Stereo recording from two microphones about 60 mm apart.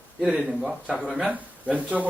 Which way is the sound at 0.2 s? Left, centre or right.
Centre.